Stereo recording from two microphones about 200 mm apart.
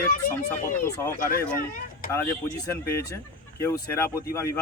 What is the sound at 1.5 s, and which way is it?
Speech, 45° left (ahead or behind).